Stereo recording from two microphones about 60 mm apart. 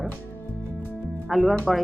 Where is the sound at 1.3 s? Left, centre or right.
Centre.